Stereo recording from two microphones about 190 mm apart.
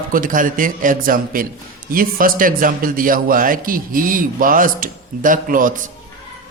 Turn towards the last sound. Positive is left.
turn(degrees=-45)  # may be behind; listen again after turning